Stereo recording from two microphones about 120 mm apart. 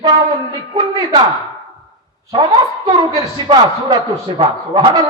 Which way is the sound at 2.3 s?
35° right (ahead or behind).